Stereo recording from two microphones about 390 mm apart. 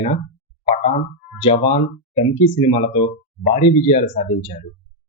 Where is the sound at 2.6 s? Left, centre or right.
Centre.